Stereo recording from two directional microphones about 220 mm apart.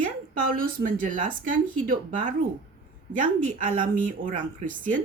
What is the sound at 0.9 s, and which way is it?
A woman's voice, 35° right (ahead or behind).